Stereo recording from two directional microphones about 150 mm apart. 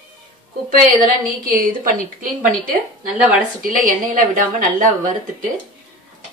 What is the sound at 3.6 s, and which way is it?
Speech, 65° right (ahead or behind).